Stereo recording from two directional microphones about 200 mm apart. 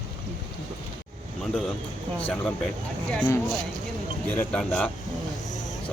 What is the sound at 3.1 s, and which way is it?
A man's voice, 10° left (ahead or behind).